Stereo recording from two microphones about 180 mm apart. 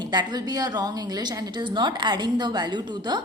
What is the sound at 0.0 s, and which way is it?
A woman's voice, 25° right (ahead or behind).